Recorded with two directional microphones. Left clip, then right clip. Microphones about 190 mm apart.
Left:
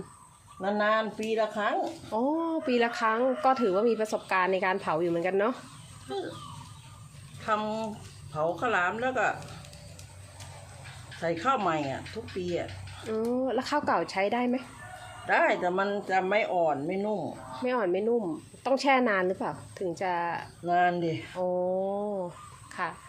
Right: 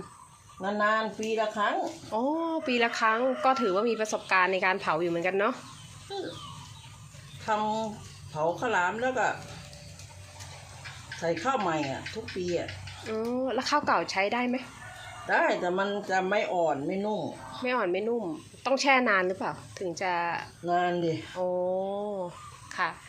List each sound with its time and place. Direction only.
0.8 s speech: 25° left (ahead or behind)
1.8 s speech: 10° left (ahead or behind)
7.4 s speech: centre (ahead or behind)
11.2 s speech: centre (ahead or behind); by 14.6 s 15° left (ahead or behind)
15.3 s speech: 10° right (ahead or behind)
17.6 s speech: 15° left (ahead or behind)
20.7 s speech: 5° right (ahead or behind)
21.7 s speech: 20° left (ahead or behind)